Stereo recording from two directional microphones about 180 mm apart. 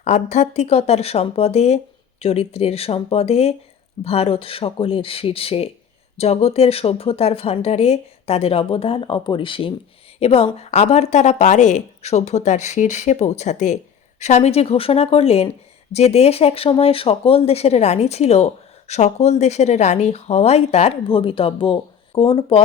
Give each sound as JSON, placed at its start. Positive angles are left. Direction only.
{"t": 0.0, "sound": "speech", "side_deg": 40}